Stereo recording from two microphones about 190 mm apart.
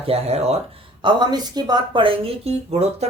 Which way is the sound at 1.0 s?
20° right (ahead or behind).